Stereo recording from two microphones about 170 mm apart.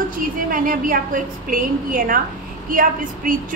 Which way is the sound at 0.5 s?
55° right (ahead or behind).